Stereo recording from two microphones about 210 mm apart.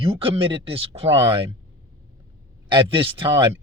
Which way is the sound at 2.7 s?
25° right (ahead or behind).